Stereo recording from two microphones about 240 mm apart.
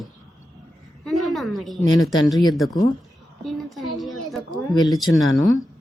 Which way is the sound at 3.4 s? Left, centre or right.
Centre.